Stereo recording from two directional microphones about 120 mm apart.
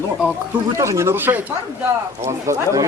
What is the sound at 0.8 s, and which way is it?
Speech, 25° right (ahead or behind).